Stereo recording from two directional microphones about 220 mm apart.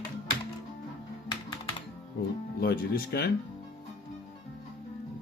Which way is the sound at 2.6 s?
45° left (ahead or behind).